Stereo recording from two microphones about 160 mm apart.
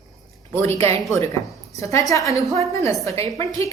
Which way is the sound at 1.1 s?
20° left (ahead or behind).